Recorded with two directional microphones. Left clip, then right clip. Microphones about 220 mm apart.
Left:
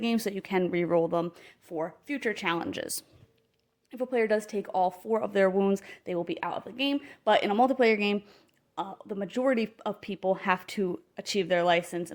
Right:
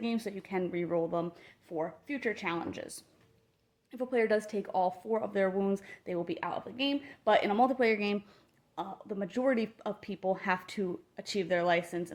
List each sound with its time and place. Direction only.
0.0 s speech: 45° left (ahead or behind)
3.9 s a woman's voice: 25° left (ahead or behind)